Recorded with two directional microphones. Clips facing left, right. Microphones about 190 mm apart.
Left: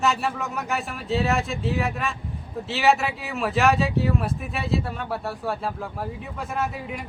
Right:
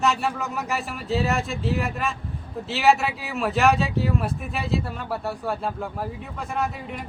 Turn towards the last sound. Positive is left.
turn(degrees=0)  # may be behind; listen again after turning